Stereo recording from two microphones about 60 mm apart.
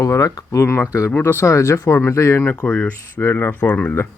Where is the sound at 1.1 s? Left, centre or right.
Left.